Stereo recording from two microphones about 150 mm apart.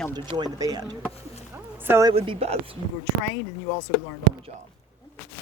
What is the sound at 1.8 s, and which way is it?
Speech, 15° right (ahead or behind).